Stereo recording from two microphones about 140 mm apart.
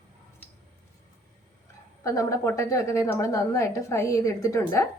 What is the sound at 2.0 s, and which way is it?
A woman's voice, 25° left (ahead or behind).